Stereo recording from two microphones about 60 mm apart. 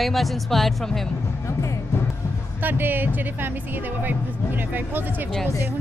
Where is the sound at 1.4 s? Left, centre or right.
Left.